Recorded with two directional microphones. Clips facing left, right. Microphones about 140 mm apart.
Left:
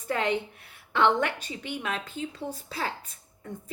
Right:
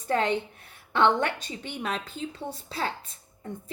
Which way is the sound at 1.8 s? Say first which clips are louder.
Right 5 dB; 35° right (ahead or behind).